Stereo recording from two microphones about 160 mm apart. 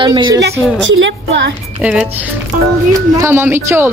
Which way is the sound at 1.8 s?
5° right (ahead or behind).